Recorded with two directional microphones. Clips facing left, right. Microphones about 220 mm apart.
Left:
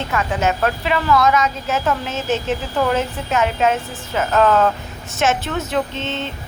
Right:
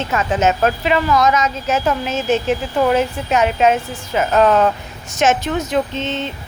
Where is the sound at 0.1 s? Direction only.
20° right (ahead or behind).